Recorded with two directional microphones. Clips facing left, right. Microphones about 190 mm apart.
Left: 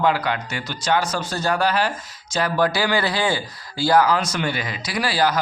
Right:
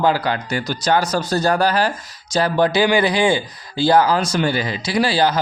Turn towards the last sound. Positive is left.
turn(degrees=-25)  # may be behind; listen again after turning